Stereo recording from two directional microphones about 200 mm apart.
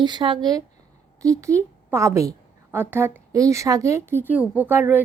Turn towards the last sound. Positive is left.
turn(degrees=-10)  # may be behind; listen again after turning